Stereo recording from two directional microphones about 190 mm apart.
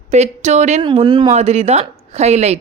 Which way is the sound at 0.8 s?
25° right (ahead or behind).